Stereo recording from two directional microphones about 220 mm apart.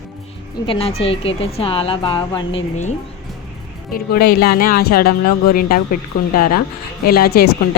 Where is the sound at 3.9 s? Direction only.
45° left (ahead or behind).